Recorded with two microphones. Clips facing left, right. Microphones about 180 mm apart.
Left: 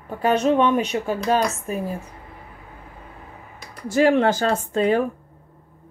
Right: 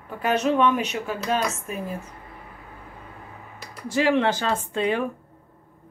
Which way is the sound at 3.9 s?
45° left (ahead or behind).